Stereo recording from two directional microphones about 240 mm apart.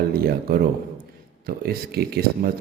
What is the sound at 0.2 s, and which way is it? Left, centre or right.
Speech, right.